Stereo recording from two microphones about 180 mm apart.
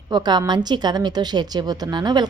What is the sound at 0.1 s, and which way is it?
A woman's voice, 25° right (ahead or behind).